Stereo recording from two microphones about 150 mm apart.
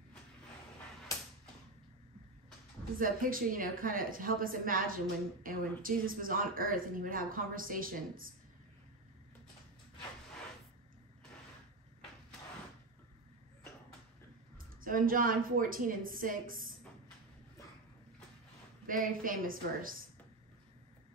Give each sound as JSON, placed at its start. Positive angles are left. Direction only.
{"t": 3.0, "sound": "a woman's voice", "side_deg": -70}
{"t": 14.8, "sound": "a woman's voice", "side_deg": -70}
{"t": 18.9, "sound": "a woman's voice", "side_deg": -65}